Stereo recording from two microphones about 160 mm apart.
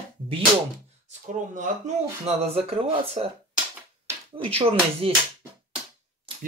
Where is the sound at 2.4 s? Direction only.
40° right (ahead or behind).